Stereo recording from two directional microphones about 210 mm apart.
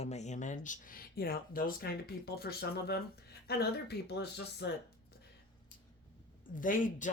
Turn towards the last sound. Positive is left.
turn(degrees=40)  # may be behind; listen again after turning